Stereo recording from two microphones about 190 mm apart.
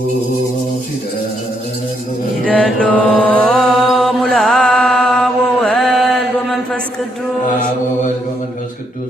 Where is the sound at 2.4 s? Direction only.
5° left (ahead or behind).